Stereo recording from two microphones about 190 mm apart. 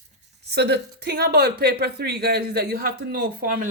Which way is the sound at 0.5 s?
60° right (ahead or behind).